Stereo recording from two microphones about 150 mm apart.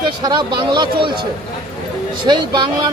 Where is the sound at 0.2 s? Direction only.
30° right (ahead or behind).